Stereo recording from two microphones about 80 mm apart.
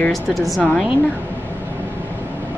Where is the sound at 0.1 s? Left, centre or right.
Centre.